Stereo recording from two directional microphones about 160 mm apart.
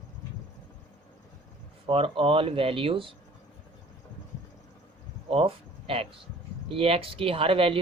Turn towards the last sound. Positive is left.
turn(degrees=-35)  # may be behind; listen again after turning